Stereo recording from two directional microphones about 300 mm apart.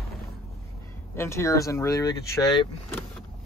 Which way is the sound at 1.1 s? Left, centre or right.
Centre.